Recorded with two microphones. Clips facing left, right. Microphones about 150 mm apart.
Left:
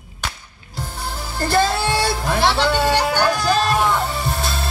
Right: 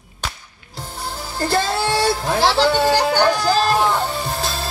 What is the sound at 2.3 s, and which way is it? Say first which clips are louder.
A man's voice: right 1 dB; 35° right (ahead or behind).